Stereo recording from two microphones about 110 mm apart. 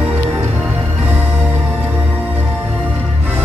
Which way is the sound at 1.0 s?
15° right (ahead or behind).